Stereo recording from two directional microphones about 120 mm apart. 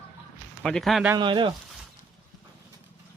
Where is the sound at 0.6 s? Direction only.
5° left (ahead or behind).